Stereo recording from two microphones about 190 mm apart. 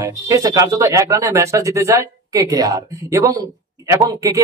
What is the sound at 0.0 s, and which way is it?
Speech, 15° right (ahead or behind).